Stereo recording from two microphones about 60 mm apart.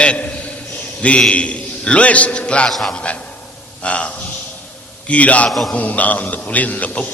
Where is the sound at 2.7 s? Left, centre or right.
Centre.